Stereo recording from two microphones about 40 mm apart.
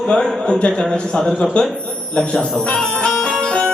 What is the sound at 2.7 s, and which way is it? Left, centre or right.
Music, centre.